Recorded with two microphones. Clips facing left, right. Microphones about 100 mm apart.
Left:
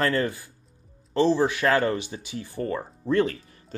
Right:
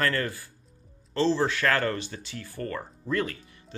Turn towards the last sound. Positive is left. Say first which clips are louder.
# left 7 dB
turn(degrees=35)  # may be behind; listen again after turning